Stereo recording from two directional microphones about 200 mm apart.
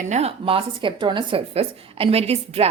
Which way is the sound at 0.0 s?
35° right (ahead or behind).